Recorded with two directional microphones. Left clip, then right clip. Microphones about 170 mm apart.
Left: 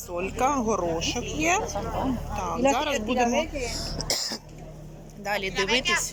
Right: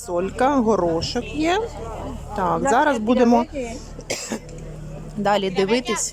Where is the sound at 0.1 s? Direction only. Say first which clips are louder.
Right 6 dB; 35° right (ahead or behind).